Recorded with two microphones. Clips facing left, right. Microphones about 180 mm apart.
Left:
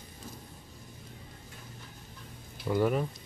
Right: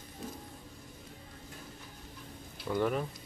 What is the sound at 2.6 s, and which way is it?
Speech, 5° left (ahead or behind).